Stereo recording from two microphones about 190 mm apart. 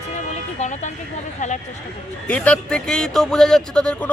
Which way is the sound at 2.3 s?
5° left (ahead or behind).